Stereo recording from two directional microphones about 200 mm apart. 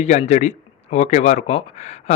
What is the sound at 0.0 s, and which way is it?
Speech, 35° left (ahead or behind).